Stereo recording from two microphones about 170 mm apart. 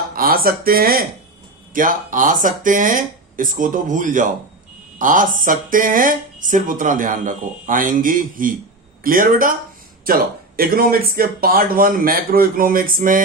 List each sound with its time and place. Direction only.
0.2 s a man's voice: 60° right (ahead or behind)